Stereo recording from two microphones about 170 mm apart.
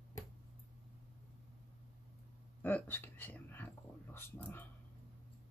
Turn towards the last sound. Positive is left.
turn(degrees=10)  # may be behind; listen again after turning